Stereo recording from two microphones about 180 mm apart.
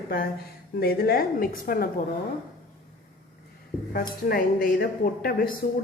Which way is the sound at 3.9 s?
55° left (ahead or behind).